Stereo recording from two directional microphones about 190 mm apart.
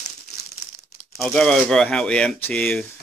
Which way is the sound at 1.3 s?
5° left (ahead or behind).